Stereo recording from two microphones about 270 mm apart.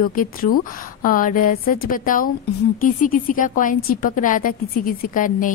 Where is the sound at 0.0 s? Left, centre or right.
Left.